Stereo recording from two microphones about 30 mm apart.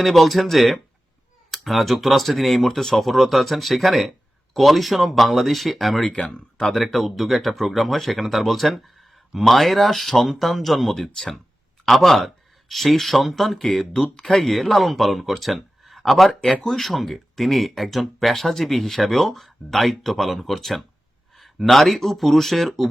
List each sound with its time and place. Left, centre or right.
0.0 s speech: centre
6.2 s speech: centre
6.7 s speech: centre
13.9 s speech: left
14.3 s speech: centre